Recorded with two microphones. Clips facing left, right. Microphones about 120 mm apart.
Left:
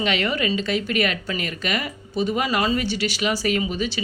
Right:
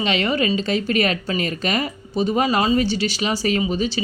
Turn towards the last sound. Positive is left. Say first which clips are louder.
# right 3 dB
turn(degrees=-30)  # may be behind; listen again after turning